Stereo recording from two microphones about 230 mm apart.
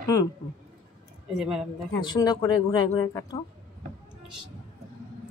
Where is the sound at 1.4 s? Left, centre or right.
Centre.